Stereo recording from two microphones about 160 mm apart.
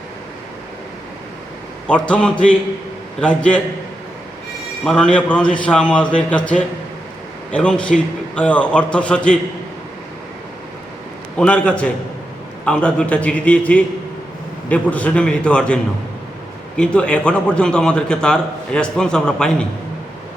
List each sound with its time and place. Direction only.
1.9 s a man's voice: 5° left (ahead or behind)
4.9 s a man's voice: 5° left (ahead or behind)
11.3 s a man's voice: 5° left (ahead or behind)